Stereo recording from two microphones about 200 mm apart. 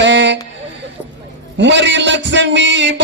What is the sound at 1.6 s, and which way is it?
Music, 65° right (ahead or behind).